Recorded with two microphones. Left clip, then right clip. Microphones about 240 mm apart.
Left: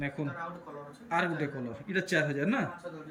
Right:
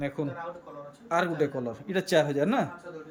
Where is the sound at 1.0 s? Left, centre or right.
Centre.